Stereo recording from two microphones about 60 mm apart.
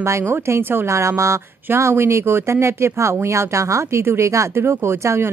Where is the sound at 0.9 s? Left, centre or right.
Right.